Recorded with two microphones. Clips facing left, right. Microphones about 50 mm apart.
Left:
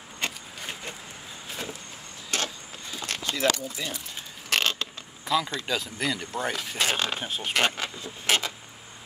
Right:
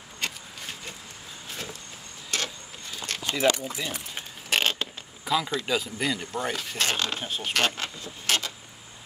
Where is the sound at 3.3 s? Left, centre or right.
Centre.